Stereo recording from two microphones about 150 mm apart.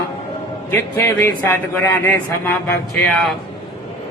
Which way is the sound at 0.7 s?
15° left (ahead or behind).